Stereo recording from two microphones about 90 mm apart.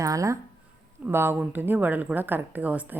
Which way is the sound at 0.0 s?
40° right (ahead or behind).